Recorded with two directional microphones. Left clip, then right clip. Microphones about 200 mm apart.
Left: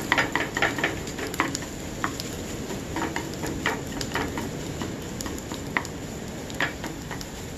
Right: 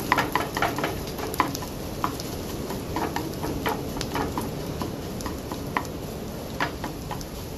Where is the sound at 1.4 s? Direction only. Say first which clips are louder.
Right 2 dB; 10° right (ahead or behind).